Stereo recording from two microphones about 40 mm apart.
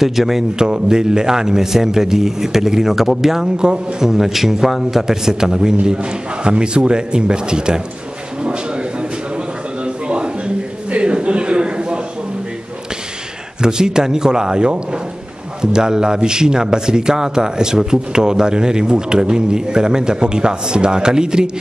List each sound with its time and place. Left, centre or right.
0.0 s speech: centre
0.6 s a man's voice: centre
3.5 s a man's voice: centre
8.4 s a sound: right
9.8 s a sound: right
13.6 s a man's voice: centre